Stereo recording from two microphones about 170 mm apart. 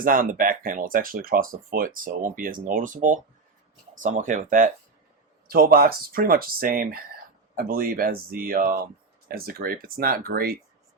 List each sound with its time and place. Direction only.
0.0 s speech: 55° right (ahead or behind)